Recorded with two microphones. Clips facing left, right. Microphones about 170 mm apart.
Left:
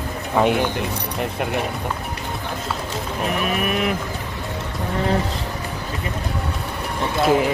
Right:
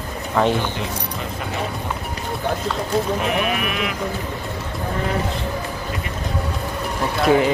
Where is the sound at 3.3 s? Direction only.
40° left (ahead or behind).